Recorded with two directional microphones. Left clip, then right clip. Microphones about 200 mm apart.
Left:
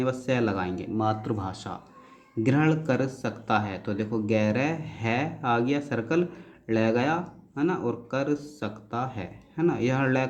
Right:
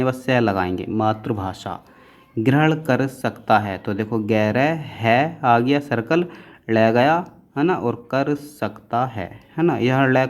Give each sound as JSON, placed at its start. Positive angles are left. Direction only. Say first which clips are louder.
{"t": 0.0, "sound": "speech", "louder": "right 7 dB", "side_deg": -40}